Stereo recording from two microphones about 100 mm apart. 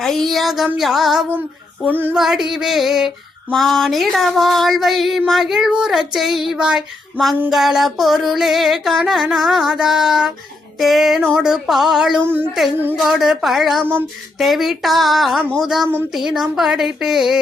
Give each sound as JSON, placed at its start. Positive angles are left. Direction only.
{"t": 0.0, "sound": "child singing", "side_deg": 5}
{"t": 1.9, "sound": "speech", "side_deg": -20}
{"t": 2.1, "sound": "child singing", "side_deg": -5}
{"t": 12.2, "sound": "speech", "side_deg": -20}
{"t": 13.0, "sound": "child singing", "side_deg": -5}